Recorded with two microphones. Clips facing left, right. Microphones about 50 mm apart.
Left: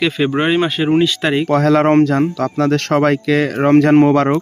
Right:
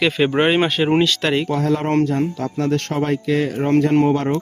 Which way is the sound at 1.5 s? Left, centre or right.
Left.